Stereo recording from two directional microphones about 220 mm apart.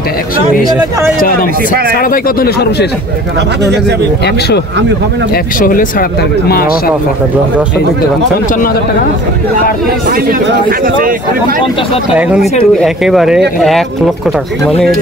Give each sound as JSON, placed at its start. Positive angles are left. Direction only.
{"t": 2.0, "sound": "speech", "side_deg": 40}
{"t": 5.3, "sound": "speech", "side_deg": 40}
{"t": 10.0, "sound": "speech", "side_deg": -40}
{"t": 12.1, "sound": "speech", "side_deg": -5}